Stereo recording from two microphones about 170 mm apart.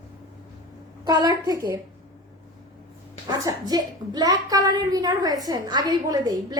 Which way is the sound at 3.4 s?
25° right (ahead or behind).